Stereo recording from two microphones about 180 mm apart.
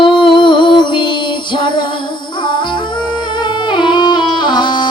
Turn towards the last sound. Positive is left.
turn(degrees=25)  # may be behind; listen again after turning